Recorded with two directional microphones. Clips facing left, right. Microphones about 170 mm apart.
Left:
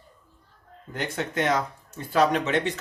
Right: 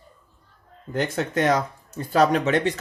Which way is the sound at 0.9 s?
40° right (ahead or behind).